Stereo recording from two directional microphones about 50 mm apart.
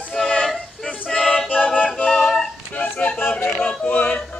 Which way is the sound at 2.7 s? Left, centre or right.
Left.